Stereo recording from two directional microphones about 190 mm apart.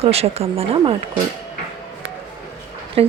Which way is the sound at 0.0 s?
30° right (ahead or behind).